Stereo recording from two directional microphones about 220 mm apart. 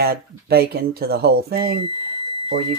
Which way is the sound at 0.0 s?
45° right (ahead or behind).